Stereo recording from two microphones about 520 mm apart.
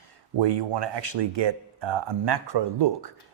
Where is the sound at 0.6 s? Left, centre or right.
Right.